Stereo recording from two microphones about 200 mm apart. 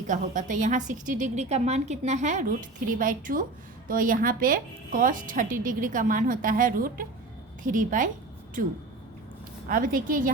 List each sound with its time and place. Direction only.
0.1 s a woman's voice: 40° right (ahead or behind)
9.6 s speech: 45° right (ahead or behind)